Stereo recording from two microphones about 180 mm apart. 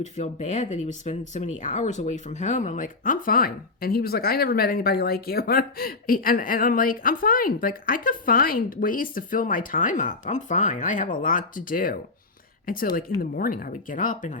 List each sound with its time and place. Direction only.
0.0 s speech: 40° left (ahead or behind)